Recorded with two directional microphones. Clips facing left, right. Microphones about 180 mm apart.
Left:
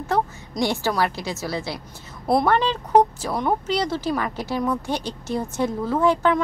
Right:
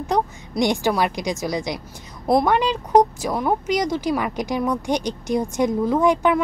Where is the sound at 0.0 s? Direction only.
15° right (ahead or behind).